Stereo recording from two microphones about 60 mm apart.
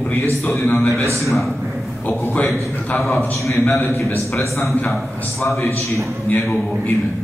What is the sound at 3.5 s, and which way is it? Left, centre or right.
A man's voice, left.